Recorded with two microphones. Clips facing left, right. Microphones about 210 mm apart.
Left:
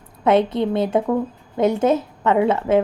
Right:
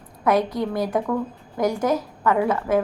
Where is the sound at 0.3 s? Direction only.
25° left (ahead or behind).